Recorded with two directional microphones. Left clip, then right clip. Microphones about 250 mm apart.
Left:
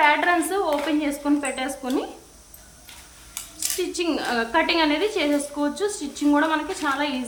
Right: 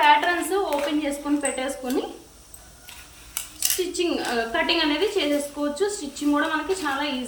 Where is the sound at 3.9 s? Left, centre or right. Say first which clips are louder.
Even; centre.